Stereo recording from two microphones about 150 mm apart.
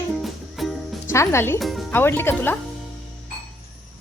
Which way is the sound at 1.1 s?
20° left (ahead or behind).